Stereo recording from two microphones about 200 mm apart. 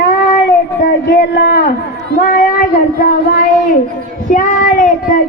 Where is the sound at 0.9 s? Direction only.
60° left (ahead or behind).